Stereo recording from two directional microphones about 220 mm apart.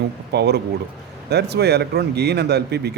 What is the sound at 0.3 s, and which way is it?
Speech, 50° right (ahead or behind).